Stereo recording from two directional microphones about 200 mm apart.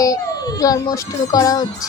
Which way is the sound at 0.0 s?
15° left (ahead or behind).